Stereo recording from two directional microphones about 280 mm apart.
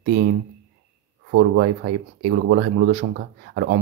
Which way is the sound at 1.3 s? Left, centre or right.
Right.